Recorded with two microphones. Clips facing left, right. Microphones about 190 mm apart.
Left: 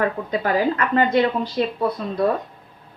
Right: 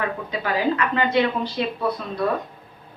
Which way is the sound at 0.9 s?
45° left (ahead or behind).